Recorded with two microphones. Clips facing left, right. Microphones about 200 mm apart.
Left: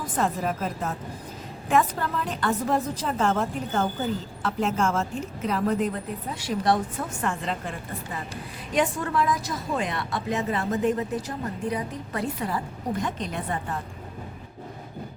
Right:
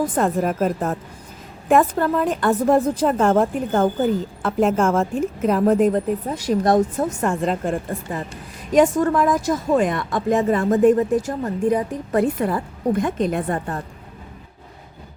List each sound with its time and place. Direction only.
0.2 s a woman's voice: 55° right (ahead or behind)